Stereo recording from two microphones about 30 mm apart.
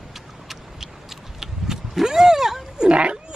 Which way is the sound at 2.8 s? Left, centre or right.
Right.